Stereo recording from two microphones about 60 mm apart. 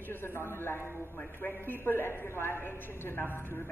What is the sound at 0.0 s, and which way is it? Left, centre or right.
A man's voice, left.